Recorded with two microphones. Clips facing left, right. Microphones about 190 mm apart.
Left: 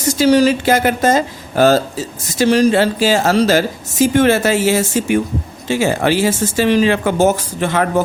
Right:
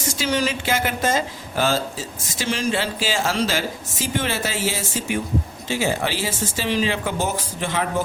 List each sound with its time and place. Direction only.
0.2 s speech: 35° left (ahead or behind)
4.0 s speech: 65° left (ahead or behind)